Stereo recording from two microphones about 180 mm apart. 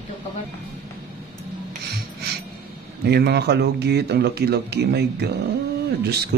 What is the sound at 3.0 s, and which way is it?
Speech, 65° right (ahead or behind).